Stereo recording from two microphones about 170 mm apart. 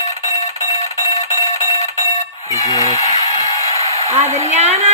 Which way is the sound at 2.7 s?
20° left (ahead or behind).